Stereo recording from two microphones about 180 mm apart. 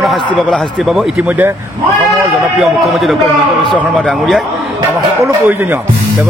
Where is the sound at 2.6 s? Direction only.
Centre (ahead or behind).